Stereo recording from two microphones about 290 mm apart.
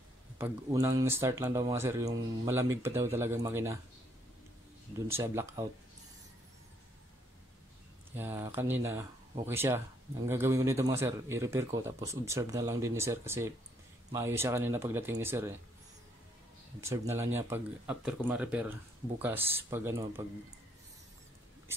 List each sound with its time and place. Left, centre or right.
0.4 s speech: centre
5.0 s speech: centre
8.2 s speech: centre
16.8 s speech: centre